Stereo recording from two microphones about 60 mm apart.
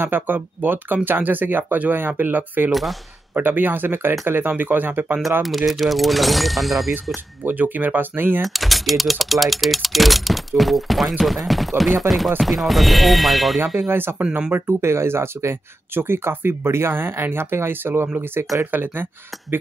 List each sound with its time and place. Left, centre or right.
0.0 s speech: right
2.7 s speech: centre
3.3 s speech: right
5.4 s speech: centre
7.4 s speech: right
8.4 s speech: centre
13.8 s speech: right